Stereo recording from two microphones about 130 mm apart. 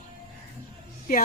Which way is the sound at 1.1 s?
90° left.